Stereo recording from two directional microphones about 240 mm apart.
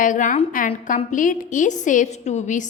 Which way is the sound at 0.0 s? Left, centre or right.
Left.